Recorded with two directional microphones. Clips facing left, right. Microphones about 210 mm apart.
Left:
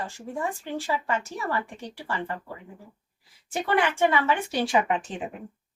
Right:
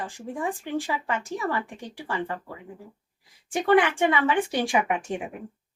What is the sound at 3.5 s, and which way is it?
A woman's voice, 15° right (ahead or behind).